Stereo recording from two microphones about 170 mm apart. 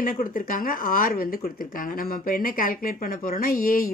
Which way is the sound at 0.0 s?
55° left (ahead or behind).